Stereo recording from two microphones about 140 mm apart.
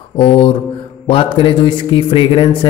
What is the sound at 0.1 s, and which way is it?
Speech, 40° left (ahead or behind).